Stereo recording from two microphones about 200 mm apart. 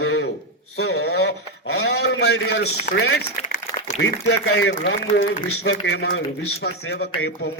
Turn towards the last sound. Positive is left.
turn(degrees=55)  # may be behind; listen again after turning